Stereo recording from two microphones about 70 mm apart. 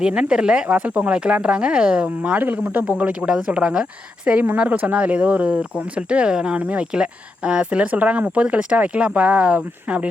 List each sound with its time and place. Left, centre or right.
0.0 s speech: centre